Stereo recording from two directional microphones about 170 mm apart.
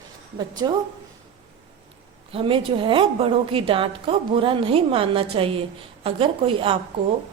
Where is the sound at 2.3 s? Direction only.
30° right (ahead or behind).